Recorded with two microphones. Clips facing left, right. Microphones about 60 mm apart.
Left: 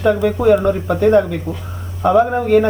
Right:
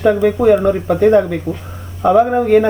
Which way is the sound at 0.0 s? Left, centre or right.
Centre.